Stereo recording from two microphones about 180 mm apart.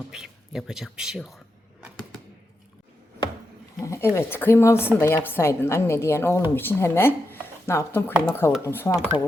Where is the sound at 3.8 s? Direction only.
15° left (ahead or behind).